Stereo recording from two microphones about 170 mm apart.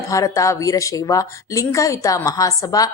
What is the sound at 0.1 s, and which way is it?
A woman's voice, 20° left (ahead or behind).